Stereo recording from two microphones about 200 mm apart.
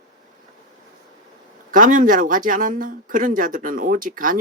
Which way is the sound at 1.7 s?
40° right (ahead or behind).